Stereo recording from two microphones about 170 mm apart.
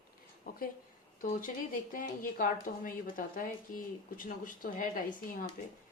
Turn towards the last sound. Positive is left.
turn(degrees=55)  # may be behind; listen again after turning